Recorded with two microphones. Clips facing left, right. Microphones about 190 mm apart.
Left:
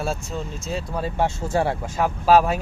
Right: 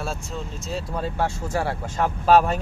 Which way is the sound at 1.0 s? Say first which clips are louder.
Left 4 dB; 20° left (ahead or behind).